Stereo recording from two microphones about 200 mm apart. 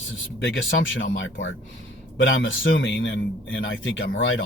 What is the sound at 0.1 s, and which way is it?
A man's voice, 65° left (ahead or behind).